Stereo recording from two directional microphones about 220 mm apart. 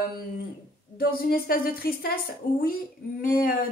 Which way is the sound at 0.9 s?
40° left (ahead or behind).